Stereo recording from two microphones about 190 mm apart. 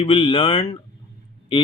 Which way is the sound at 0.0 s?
30° left (ahead or behind).